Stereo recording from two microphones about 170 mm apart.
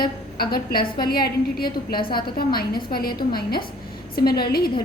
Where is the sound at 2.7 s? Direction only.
30° left (ahead or behind).